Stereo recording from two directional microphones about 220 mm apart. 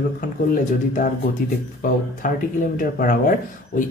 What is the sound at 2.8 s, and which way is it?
A man's voice, 40° left (ahead or behind).